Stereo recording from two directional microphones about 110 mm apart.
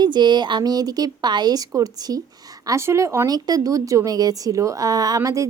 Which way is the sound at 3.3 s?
35° right (ahead or behind).